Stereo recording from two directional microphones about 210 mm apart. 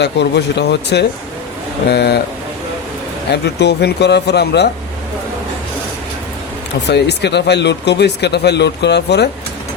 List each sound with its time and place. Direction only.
0.0 s speech: 55° left (ahead or behind)
3.3 s speech: 55° left (ahead or behind)
6.8 s speech: 55° left (ahead or behind)